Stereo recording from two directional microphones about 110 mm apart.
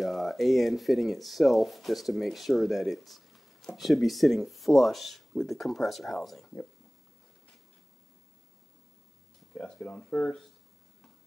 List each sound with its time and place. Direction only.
0.0 s speech: centre (ahead or behind)
9.5 s speech: 5° left (ahead or behind)